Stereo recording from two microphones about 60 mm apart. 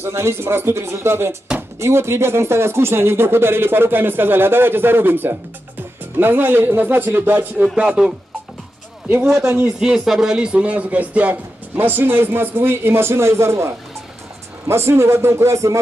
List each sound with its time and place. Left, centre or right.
0.0 s speech: right
7.6 s speech: centre
9.2 s speech: centre
10.3 s speech: centre; by 15.8 s right